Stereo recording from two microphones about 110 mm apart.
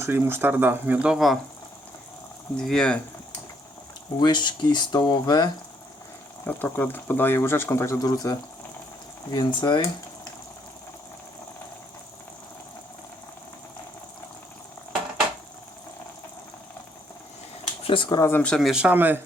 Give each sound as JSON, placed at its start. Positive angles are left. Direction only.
{"t": 0.0, "sound": "speech", "side_deg": -20}
{"t": 2.6, "sound": "speech", "side_deg": 5}
{"t": 4.2, "sound": "speech", "side_deg": 45}
{"t": 6.4, "sound": "speech", "side_deg": 15}
{"t": 17.8, "sound": "speech", "side_deg": 50}
{"t": 18.1, "sound": "speech", "side_deg": 25}
{"t": 18.4, "sound": "speech", "side_deg": 5}
{"t": 18.7, "sound": "speech", "side_deg": -10}